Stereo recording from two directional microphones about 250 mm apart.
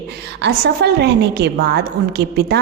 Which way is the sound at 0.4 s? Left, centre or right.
Right.